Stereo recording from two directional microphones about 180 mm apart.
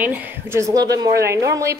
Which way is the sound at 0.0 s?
10° right (ahead or behind).